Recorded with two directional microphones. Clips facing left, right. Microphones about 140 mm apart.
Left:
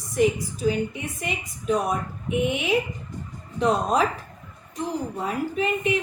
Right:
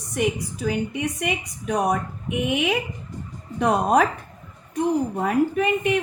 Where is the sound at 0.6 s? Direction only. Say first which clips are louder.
Even; 70° right (ahead or behind).